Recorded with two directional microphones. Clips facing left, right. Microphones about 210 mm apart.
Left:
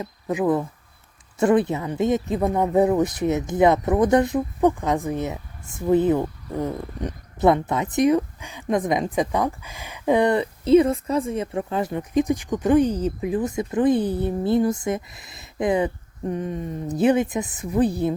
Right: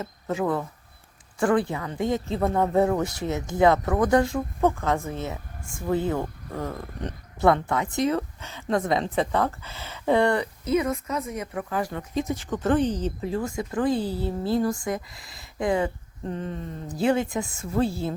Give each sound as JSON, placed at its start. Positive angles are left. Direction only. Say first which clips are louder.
{"t": 0.0, "sound": "speech", "louder": "left 4 dB", "side_deg": 15}